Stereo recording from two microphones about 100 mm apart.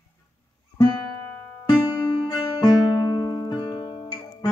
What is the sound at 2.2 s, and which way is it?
Music, 45° left (ahead or behind).